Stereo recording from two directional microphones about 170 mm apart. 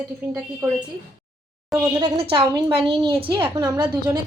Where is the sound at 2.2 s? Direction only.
30° right (ahead or behind).